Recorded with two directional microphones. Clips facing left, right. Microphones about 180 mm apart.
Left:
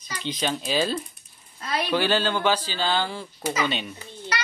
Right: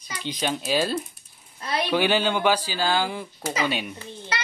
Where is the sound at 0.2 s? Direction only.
10° right (ahead or behind).